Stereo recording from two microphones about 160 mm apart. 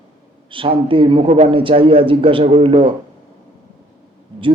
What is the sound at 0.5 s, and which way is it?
A man's voice, 35° right (ahead or behind).